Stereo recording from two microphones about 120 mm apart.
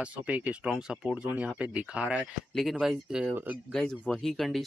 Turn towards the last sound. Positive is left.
turn(degrees=0)  # may be behind; listen again after turning